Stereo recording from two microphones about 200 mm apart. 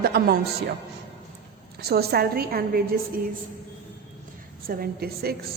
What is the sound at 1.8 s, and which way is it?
A woman's voice, 50° right (ahead or behind).